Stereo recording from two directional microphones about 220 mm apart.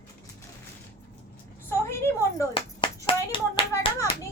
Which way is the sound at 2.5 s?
25° left (ahead or behind).